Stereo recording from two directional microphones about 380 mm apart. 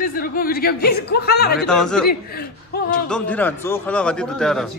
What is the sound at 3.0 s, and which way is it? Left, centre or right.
A man's voice, centre.